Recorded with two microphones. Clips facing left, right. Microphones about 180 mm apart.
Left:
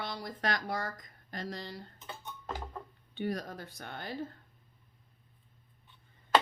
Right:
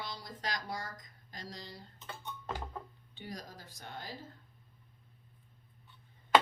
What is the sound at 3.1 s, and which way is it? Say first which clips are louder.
Speech: left 10 dB; 60° left (ahead or behind).